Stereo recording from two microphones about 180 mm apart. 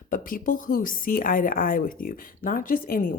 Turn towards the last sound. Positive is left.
turn(degrees=50)  # may be behind; listen again after turning